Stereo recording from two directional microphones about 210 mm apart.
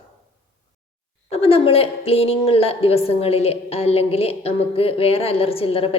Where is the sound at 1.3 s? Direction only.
25° left (ahead or behind).